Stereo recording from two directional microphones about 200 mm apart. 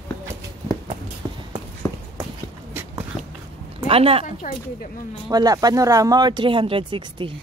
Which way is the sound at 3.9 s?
30° right (ahead or behind).